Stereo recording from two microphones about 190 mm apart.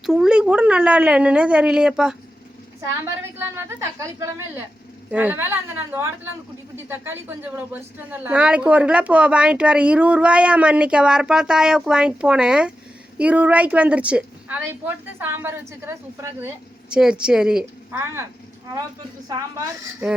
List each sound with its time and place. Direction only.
0.0 s a woman's voice: centre (ahead or behind)
19.3 s a woman's voice: 15° right (ahead or behind)